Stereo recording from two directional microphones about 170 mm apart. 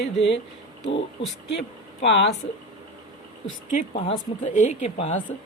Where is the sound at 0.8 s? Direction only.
35° left (ahead or behind).